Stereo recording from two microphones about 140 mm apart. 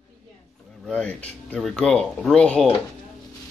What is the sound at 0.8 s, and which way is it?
Speech, 5° left (ahead or behind).